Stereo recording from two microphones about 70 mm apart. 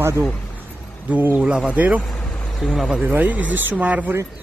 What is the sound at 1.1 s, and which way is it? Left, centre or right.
Speech, right.